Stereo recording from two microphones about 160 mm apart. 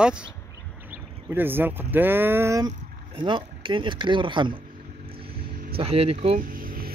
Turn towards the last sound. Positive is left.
turn(degrees=-65)  # may be behind; listen again after turning